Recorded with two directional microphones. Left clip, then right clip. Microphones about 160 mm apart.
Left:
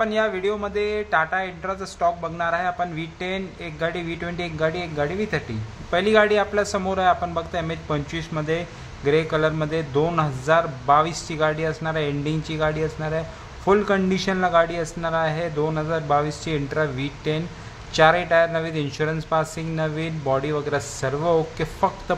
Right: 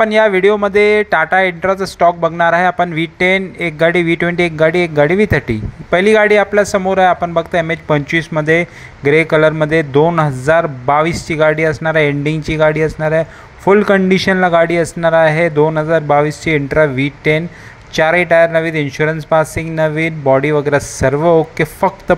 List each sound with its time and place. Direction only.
0.0 s speech: 45° right (ahead or behind)